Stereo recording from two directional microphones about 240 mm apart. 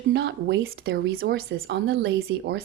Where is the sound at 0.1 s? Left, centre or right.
Right.